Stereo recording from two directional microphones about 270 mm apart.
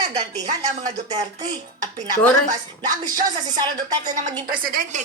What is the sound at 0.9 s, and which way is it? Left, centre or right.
Speech, centre.